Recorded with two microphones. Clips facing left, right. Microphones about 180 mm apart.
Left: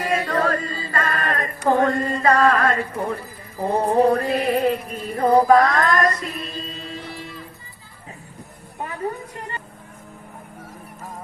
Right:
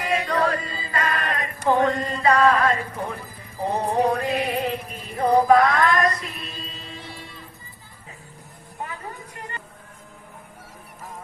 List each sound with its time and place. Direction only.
0.0 s chant: 45° left (ahead or behind)
1.6 s music: 45° left (ahead or behind)